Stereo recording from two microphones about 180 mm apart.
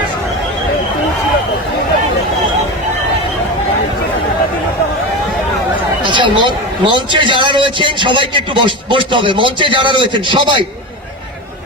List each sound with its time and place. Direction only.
6.0 s a man's voice: 25° right (ahead or behind)